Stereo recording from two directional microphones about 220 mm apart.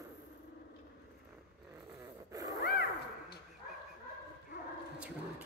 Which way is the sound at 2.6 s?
45° left (ahead or behind).